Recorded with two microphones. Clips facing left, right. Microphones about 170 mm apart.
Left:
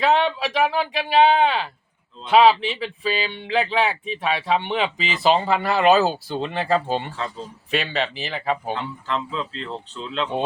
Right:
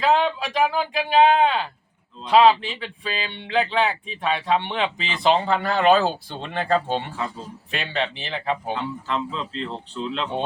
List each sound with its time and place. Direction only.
0.0 s speech: centre (ahead or behind)